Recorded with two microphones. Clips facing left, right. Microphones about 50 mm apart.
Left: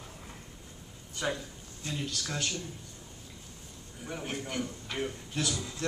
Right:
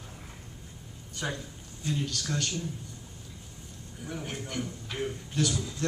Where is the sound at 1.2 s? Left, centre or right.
Centre.